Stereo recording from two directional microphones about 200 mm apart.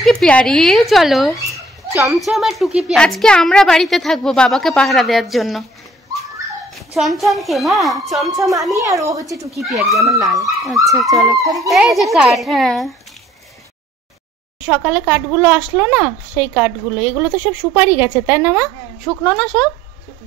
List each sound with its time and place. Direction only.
0.0 s a woman's voice: 5° left (ahead or behind)
6.7 s a woman's voice: centre (ahead or behind)
8.7 s speech: 15° right (ahead or behind)
9.6 s a woman's voice: centre (ahead or behind)
9.8 s speech: 15° right (ahead or behind)
10.9 s a woman's voice: centre (ahead or behind)
11.3 s speech: 15° right (ahead or behind)
11.7 s a woman's voice: centre (ahead or behind)
14.7 s speech: 5° right (ahead or behind)
19.0 s a woman's voice: 5° left (ahead or behind)